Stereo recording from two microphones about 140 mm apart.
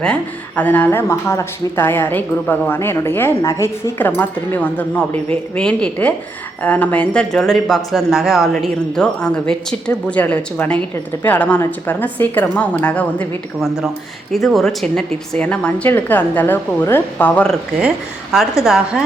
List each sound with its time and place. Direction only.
0.0 s speech: 10° left (ahead or behind)
13.6 s a woman's voice: centre (ahead or behind)
17.7 s a woman's voice: 5° right (ahead or behind)